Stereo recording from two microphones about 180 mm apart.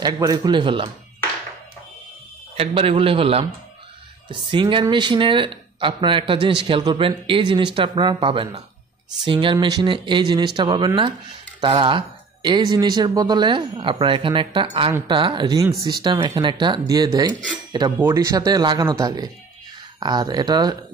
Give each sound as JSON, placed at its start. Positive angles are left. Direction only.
{"t": 0.0, "sound": "speech", "side_deg": -20}
{"t": 2.5, "sound": "a man's voice", "side_deg": -30}